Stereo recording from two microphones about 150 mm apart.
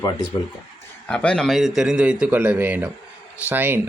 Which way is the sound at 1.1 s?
5° left (ahead or behind).